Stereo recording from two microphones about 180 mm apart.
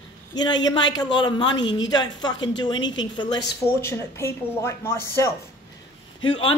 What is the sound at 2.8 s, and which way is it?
Speech, 90° left.